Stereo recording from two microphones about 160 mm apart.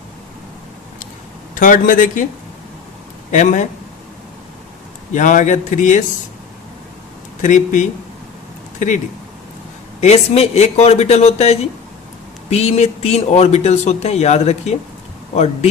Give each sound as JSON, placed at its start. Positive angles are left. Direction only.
{"t": 1.5, "sound": "a man's voice", "side_deg": 60}
{"t": 3.3, "sound": "a man's voice", "side_deg": 50}
{"t": 5.1, "sound": "a man's voice", "side_deg": 50}
{"t": 7.4, "sound": "a man's voice", "side_deg": 50}
{"t": 10.0, "sound": "a man's voice", "side_deg": 40}